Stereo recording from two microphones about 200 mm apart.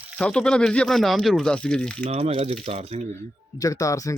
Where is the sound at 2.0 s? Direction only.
30° right (ahead or behind).